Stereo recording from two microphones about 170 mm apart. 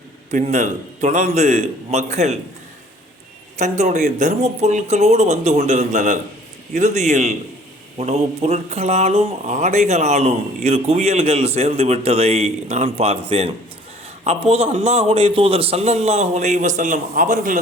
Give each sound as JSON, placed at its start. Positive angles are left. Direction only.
{"t": 0.3, "sound": "speech", "side_deg": -45}
{"t": 3.6, "sound": "speech", "side_deg": -45}